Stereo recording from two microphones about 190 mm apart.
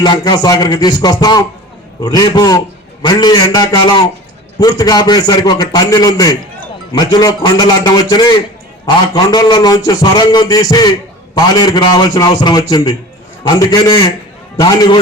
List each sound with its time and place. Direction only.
0.0 s speech: 20° left (ahead or behind)